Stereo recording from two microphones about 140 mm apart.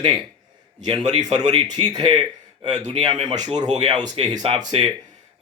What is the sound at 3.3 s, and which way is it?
Speech, 60° right (ahead or behind).